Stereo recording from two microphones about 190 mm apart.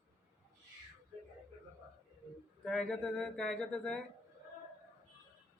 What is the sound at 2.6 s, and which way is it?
A man's voice, 5° left (ahead or behind).